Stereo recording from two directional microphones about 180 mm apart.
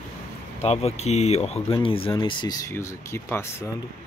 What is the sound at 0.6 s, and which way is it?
Speech, 35° left (ahead or behind).